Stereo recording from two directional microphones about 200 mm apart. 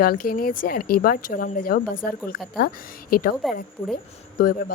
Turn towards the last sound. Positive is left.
turn(degrees=45)  # may be behind; listen again after turning